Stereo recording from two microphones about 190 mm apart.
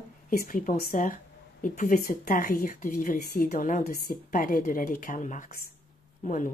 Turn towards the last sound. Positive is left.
turn(degrees=40)  # may be behind; listen again after turning